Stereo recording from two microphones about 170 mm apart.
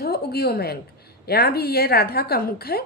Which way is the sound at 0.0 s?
65° left (ahead or behind).